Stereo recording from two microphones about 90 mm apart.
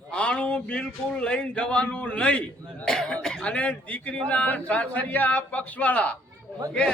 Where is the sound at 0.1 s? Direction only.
10° left (ahead or behind).